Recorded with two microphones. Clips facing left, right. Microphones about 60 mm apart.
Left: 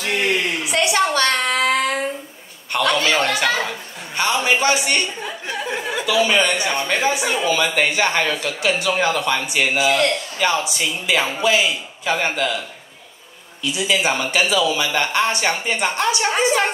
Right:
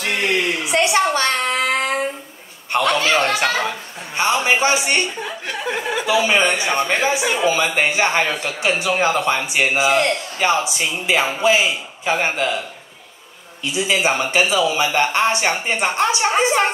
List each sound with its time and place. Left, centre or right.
0.7 s a sound: right
2.7 s speech: right
13.7 s speech: right